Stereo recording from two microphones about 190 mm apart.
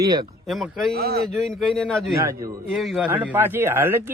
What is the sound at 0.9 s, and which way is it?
Mantra, 55° right (ahead or behind).